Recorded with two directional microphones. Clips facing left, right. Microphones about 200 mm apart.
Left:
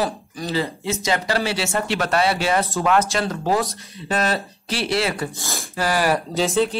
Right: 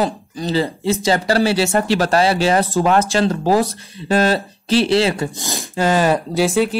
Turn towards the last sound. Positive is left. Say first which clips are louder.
# right 3 dB
turn(degrees=-10)  # may be behind; listen again after turning